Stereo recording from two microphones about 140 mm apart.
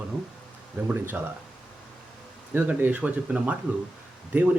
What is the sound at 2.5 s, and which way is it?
Speech, 10° right (ahead or behind).